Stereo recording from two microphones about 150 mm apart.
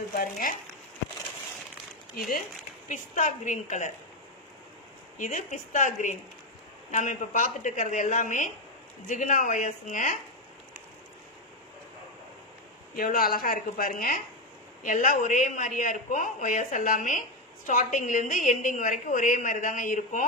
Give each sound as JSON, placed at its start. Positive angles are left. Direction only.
{"t": 0.1, "sound": "speech", "side_deg": 70}
{"t": 2.9, "sound": "a woman's voice", "side_deg": 55}
{"t": 5.2, "sound": "a woman's voice", "side_deg": 55}
{"t": 12.9, "sound": "a woman's voice", "side_deg": 75}